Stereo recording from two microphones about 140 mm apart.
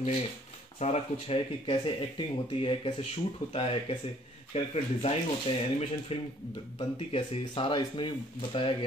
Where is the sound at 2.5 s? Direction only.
40° left (ahead or behind).